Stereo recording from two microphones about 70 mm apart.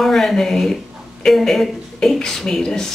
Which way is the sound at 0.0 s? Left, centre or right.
Centre.